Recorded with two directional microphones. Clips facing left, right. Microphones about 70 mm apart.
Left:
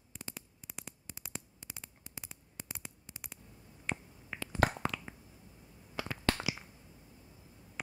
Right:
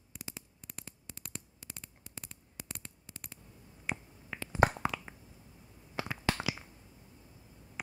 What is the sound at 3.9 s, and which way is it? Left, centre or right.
Finger snapping, centre.